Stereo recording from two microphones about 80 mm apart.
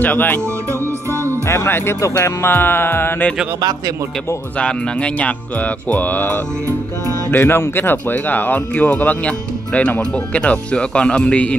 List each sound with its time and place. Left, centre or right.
0.0 s speech: left
1.1 s music: right
1.5 s speech: left
4.6 s speech: centre